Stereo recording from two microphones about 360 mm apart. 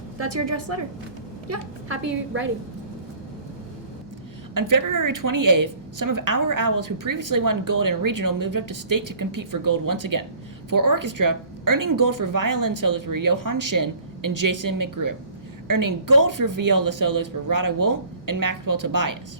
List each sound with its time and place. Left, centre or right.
0.2 s a woman's voice: right
4.5 s a woman's voice: right